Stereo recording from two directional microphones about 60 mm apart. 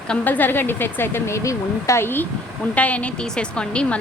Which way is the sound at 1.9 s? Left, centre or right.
Left.